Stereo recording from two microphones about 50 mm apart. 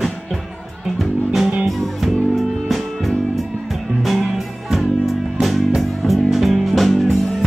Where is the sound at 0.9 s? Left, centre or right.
Centre.